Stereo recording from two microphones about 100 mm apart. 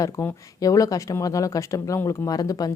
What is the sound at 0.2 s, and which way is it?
Speech, 35° left (ahead or behind).